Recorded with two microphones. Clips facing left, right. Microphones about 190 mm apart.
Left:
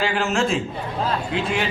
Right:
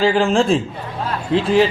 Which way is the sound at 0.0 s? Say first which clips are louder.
Right 6 dB; 30° right (ahead or behind).